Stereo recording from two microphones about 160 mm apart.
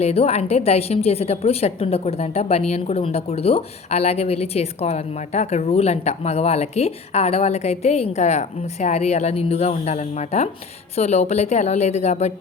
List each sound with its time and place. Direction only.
0.0 s a woman's voice: 40° left (ahead or behind)